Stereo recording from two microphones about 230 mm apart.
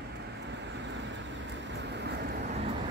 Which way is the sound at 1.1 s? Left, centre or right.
Right.